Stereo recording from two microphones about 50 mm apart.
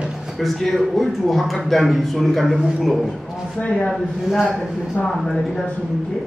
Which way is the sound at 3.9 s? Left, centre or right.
Centre.